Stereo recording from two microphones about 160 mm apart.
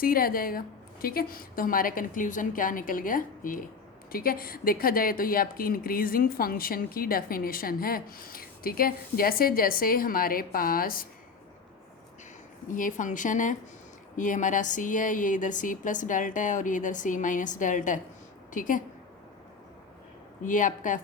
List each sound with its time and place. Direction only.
0.0 s speech: 65° left (ahead or behind)
12.6 s speech: 55° left (ahead or behind)
20.4 s speech: 55° left (ahead or behind)